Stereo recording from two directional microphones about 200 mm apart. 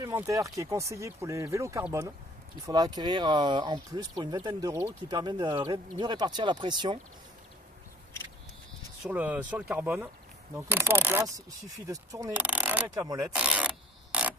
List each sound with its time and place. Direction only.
0.0 s speech: 15° right (ahead or behind)
9.1 s speech: 10° right (ahead or behind)
13.3 s a sound: 5° right (ahead or behind)